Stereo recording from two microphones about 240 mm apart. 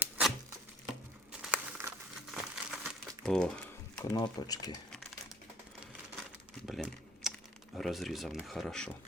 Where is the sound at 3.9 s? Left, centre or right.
Centre.